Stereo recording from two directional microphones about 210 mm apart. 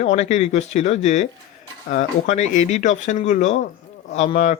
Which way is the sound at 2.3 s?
35° left (ahead or behind).